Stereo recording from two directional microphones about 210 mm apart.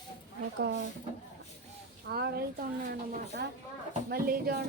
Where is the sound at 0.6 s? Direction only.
55° right (ahead or behind).